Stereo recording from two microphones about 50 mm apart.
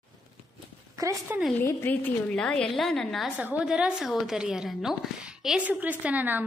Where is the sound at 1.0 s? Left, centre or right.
Right.